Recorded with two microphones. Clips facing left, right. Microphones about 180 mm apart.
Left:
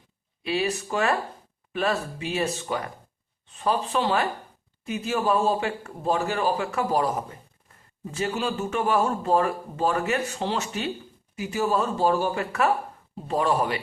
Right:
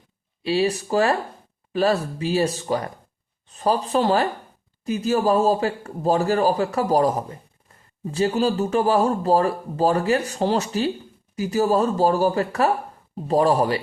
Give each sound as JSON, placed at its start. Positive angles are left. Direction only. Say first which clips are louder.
{"t": 0.4, "sound": "a man's voice", "louder": "right 5 dB", "side_deg": -30}